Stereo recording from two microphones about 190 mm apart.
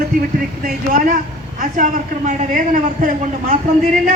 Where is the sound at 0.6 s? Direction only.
45° right (ahead or behind).